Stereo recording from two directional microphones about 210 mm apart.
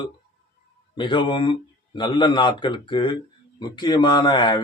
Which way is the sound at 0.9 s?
20° left (ahead or behind).